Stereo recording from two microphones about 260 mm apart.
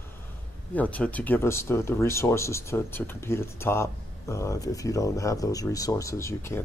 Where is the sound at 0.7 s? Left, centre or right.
Centre.